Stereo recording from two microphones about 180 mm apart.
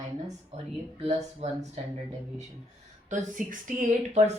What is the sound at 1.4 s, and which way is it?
Speech, 35° right (ahead or behind).